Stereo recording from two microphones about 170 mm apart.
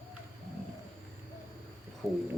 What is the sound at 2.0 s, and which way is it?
Speech, 15° right (ahead or behind).